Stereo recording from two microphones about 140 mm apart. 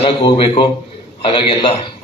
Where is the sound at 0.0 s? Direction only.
35° left (ahead or behind).